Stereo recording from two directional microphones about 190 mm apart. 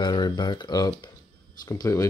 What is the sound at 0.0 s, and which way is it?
Speech, 25° left (ahead or behind).